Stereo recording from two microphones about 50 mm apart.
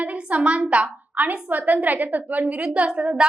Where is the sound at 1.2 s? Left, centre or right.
Right.